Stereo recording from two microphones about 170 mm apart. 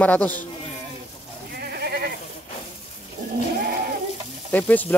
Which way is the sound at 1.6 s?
65° right (ahead or behind).